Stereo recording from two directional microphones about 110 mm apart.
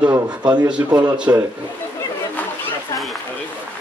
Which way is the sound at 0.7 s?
10° right (ahead or behind).